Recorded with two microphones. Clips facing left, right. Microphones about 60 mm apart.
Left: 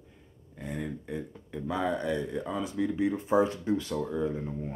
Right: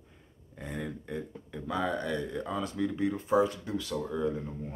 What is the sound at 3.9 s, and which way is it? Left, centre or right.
Speech, centre.